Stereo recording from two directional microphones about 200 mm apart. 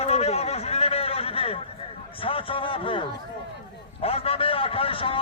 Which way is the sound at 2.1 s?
25° left (ahead or behind).